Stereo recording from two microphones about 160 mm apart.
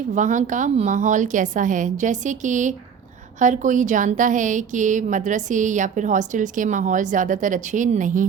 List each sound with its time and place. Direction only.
0.1 s a woman's voice: 50° right (ahead or behind)